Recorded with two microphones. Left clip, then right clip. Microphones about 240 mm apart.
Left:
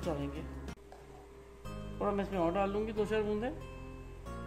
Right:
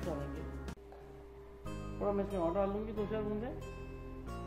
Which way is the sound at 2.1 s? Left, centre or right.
Left.